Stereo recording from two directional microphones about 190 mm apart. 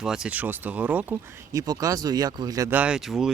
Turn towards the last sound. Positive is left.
turn(degrees=0)  # may be behind; listen again after turning